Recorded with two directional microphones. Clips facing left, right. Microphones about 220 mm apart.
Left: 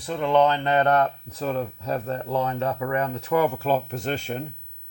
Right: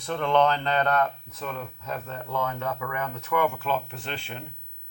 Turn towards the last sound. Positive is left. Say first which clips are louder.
# left 9 dB
turn(degrees=40)  # may be behind; listen again after turning